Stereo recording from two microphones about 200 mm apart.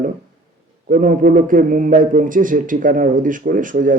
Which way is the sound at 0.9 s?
45° right (ahead or behind).